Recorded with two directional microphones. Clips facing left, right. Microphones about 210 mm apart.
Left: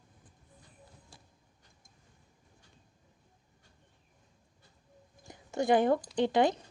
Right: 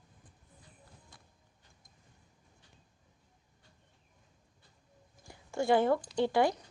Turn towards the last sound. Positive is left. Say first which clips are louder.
# left 2 dB
turn(degrees=20)  # may be behind; listen again after turning